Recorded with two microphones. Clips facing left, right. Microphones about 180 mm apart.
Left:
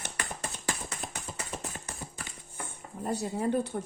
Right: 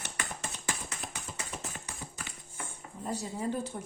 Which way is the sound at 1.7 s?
35° left (ahead or behind).